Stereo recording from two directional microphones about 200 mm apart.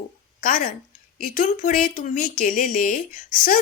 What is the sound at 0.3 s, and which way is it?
Speech, 45° left (ahead or behind).